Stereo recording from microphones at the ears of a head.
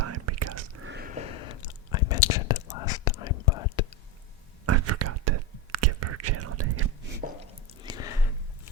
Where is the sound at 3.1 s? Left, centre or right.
Left.